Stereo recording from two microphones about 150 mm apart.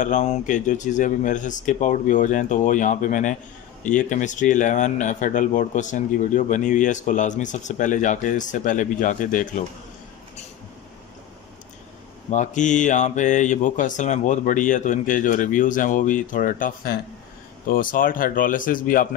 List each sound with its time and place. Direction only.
0.0 s speech: 55° left (ahead or behind)
12.3 s speech: 55° left (ahead or behind)